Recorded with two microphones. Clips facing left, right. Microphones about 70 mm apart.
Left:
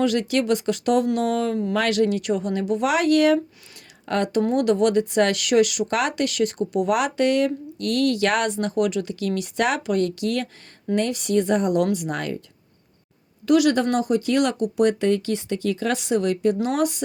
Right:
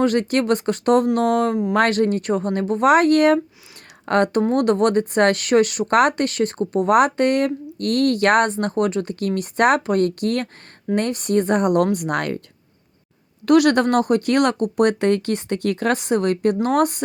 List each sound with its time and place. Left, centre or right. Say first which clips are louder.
0.0 s speech: right 3 dB; right
13.4 s speech: right 3 dB; right